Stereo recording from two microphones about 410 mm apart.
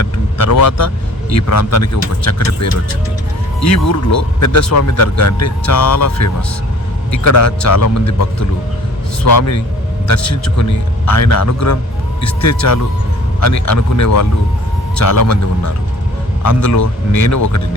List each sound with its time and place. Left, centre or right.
0.0 s vehicle: left
0.5 s a man's voice: left